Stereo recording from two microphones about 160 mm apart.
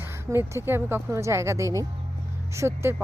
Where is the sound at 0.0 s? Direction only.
15° right (ahead or behind).